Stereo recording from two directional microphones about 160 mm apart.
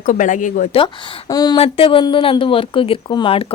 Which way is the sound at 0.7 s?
25° left (ahead or behind).